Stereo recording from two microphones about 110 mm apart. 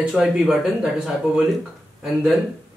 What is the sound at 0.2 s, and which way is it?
Speech, 10° right (ahead or behind).